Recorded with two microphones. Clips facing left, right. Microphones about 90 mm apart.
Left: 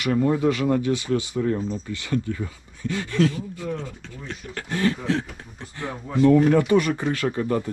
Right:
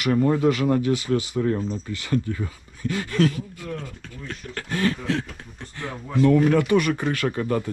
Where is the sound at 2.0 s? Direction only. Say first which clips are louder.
Right 2 dB; 40° right (ahead or behind).